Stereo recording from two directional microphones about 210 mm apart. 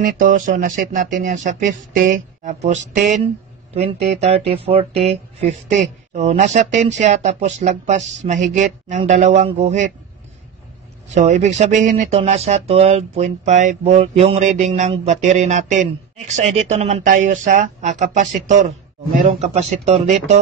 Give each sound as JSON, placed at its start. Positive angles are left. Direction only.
{"t": 0.0, "sound": "speech", "side_deg": -40}
{"t": 11.1, "sound": "speech", "side_deg": -35}